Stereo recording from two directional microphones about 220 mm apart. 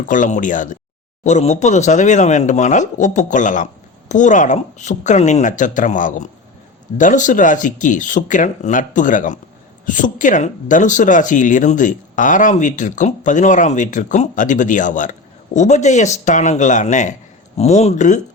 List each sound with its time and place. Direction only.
0.0 s speech: 35° left (ahead or behind)